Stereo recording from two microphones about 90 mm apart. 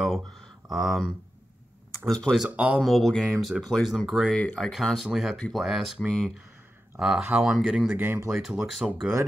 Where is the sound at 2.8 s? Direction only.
Centre (ahead or behind).